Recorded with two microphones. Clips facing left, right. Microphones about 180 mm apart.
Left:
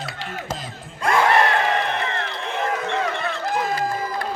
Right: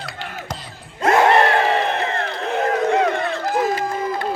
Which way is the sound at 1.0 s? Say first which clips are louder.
Right 4 dB; 45° right (ahead or behind).